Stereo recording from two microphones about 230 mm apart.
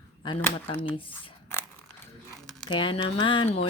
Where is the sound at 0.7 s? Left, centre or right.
Left.